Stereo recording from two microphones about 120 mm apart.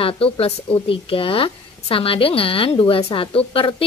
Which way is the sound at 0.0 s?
55° left (ahead or behind).